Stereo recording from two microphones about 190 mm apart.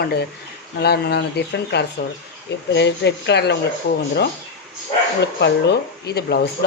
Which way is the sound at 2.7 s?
65° left (ahead or behind).